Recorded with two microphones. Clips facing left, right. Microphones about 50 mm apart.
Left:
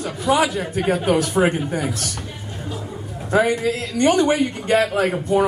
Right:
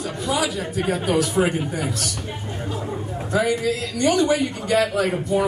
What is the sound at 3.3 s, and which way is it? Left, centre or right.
A man's voice, left.